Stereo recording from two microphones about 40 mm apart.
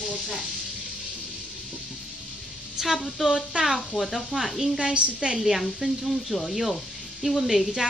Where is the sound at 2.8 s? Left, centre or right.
Centre.